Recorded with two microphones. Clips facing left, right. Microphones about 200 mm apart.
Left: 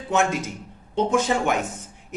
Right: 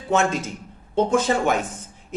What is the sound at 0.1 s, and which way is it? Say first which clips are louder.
Speech: right 1 dB; 15° left (ahead or behind).